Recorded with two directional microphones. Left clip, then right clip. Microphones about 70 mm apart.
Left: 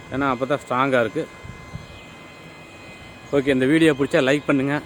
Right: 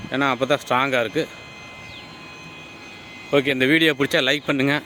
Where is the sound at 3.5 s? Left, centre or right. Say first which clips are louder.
Left 2 dB; right.